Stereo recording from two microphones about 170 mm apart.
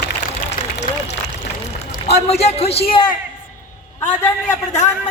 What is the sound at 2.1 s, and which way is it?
A man's voice, 40° left (ahead or behind).